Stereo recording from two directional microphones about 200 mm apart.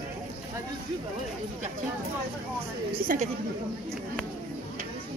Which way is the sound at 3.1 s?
45° right (ahead or behind).